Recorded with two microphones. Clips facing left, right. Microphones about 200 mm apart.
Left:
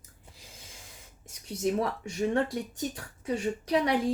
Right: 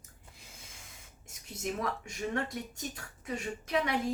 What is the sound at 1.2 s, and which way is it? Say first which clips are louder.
Speech: left 8 dB; 30° left (ahead or behind).